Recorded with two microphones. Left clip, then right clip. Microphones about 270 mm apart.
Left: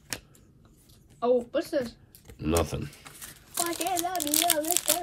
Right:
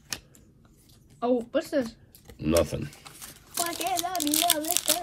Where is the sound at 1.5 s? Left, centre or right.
Right.